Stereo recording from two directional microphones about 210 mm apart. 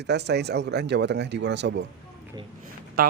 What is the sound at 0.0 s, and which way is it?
Speech, 55° right (ahead or behind).